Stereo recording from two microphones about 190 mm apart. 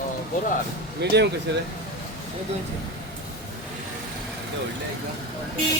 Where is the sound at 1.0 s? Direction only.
65° right (ahead or behind).